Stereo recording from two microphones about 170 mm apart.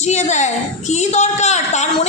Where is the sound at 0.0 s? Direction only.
45° left (ahead or behind).